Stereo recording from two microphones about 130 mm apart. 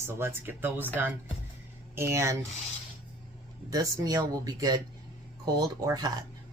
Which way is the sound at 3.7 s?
30° right (ahead or behind).